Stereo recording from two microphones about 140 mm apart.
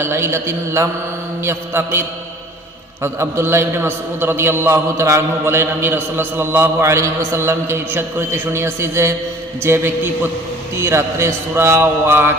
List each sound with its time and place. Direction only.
0.0 s a man's voice: 15° right (ahead or behind)